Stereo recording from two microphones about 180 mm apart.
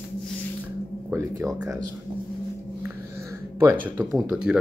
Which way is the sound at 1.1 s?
20° right (ahead or behind).